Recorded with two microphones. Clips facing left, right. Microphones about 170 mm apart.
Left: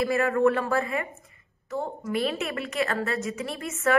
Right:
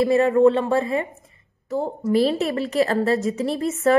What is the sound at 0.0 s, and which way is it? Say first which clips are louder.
A woman's voice: right 7 dB; 25° right (ahead or behind).